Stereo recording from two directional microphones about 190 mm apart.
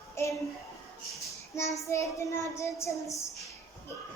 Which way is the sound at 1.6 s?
15° left (ahead or behind).